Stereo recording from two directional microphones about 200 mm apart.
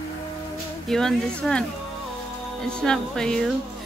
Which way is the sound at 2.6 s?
5° left (ahead or behind).